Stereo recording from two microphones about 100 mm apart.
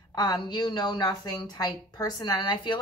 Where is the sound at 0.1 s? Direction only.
45° left (ahead or behind).